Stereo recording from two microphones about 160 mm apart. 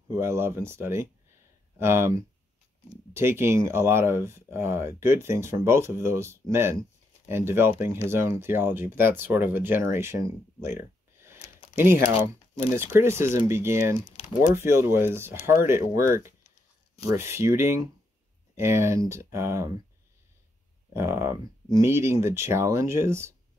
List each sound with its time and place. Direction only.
0.1 s speech: 15° right (ahead or behind)
11.8 s speech: 15° right (ahead or behind)
13.9 s speech: 45° left (ahead or behind)
14.5 s speech: 15° right (ahead or behind)
20.9 s speech: 15° right (ahead or behind)